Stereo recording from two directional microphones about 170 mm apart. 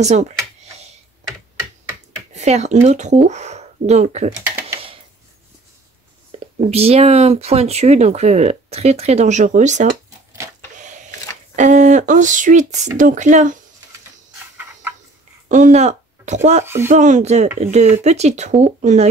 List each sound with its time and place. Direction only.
0.0 s speech: 40° right (ahead or behind)
2.3 s speech: 40° right (ahead or behind)
6.6 s speech: 35° right (ahead or behind)
10.8 s printer: 45° right (ahead or behind)
11.5 s speech: 45° right (ahead or behind)
14.6 s a sound: 10° right (ahead or behind)
15.4 s a sound: 45° right (ahead or behind)
16.6 s speech: 15° right (ahead or behind)
16.9 s speech: 45° right (ahead or behind)